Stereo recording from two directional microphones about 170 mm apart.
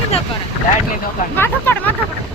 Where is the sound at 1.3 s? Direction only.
10° left (ahead or behind).